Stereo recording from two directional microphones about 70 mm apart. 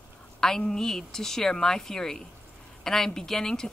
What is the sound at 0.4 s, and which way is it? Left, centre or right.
Speech, centre.